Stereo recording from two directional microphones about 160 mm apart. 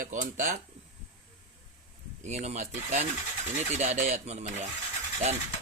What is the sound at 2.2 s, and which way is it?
Speech, 45° right (ahead or behind).